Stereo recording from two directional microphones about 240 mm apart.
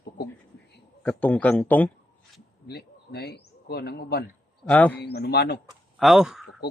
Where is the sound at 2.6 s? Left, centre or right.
Left.